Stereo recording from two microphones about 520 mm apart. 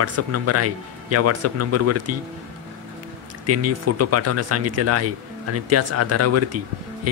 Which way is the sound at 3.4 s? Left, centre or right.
Right.